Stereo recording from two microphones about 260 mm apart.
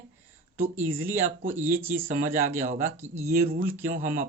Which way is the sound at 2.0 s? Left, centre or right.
Right.